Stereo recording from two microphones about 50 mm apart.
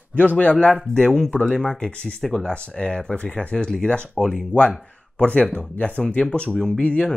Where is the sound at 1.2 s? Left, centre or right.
Centre.